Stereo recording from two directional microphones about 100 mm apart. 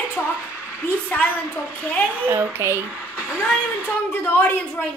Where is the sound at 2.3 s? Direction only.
20° right (ahead or behind).